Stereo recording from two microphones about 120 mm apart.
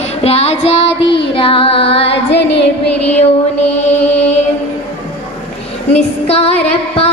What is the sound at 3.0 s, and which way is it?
Music, 65° left (ahead or behind).